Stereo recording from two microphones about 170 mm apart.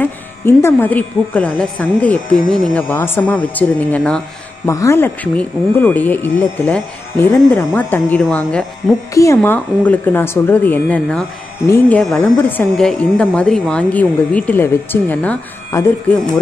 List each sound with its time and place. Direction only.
0.0 s speech: 15° left (ahead or behind)
9.1 s speech: 15° left (ahead or behind)